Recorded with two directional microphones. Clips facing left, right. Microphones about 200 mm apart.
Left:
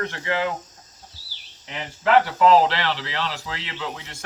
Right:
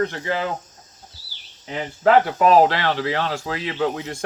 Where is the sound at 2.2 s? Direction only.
20° right (ahead or behind).